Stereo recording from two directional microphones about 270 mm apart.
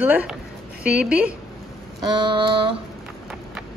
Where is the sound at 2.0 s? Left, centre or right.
Centre.